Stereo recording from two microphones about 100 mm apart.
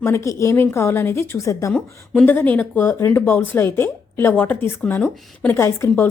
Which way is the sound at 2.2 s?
20° left (ahead or behind).